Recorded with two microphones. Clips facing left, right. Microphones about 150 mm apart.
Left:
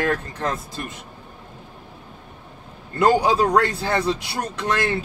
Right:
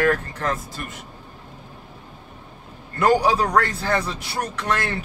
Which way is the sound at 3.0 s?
25° left (ahead or behind).